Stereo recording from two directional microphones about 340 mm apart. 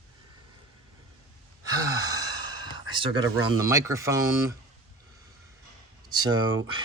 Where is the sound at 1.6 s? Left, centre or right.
Centre.